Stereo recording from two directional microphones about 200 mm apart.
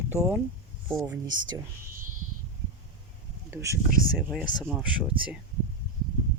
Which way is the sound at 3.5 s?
15° right (ahead or behind).